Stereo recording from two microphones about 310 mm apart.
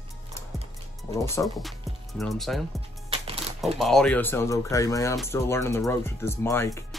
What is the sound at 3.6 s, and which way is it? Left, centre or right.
Speech, centre.